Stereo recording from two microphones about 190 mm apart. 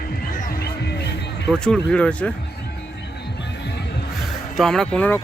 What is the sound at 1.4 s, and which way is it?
Speech, 5° left (ahead or behind).